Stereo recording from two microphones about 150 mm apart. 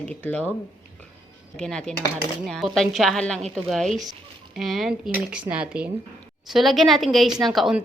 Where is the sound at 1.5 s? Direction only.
5° left (ahead or behind).